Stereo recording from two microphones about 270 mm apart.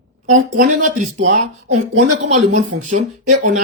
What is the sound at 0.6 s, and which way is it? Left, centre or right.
Speech, right.